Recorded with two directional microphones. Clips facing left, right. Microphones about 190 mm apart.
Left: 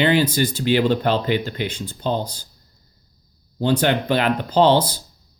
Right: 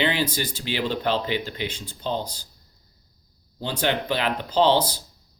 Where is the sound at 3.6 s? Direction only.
50° left (ahead or behind).